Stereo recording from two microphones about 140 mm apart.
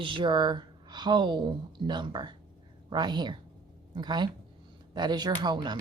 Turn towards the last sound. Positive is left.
turn(degrees=-30)  # may be behind; listen again after turning